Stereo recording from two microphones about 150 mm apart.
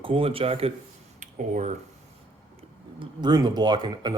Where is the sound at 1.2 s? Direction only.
55° right (ahead or behind).